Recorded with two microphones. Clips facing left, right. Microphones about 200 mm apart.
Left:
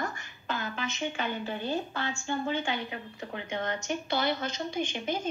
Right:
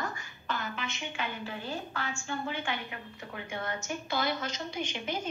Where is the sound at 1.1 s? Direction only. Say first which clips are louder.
Left 4 dB; 25° left (ahead or behind).